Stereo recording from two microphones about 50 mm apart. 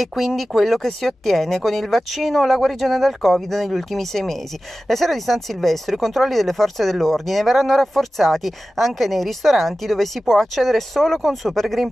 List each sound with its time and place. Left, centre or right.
0.0 s speech: centre